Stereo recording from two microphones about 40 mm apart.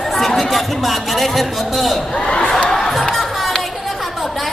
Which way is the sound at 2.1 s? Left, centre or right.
Left.